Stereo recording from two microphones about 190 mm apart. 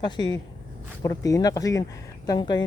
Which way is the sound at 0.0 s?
20° left (ahead or behind).